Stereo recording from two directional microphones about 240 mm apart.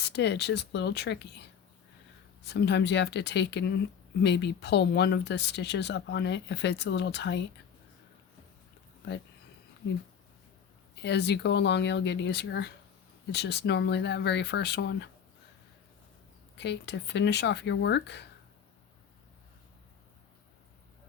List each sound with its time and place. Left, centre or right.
0.0 s speech: left
11.0 s speech: left
16.6 s speech: left